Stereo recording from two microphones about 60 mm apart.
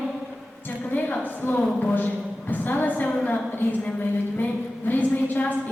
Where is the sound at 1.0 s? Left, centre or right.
Left.